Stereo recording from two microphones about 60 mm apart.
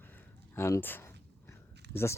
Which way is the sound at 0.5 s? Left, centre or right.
Left.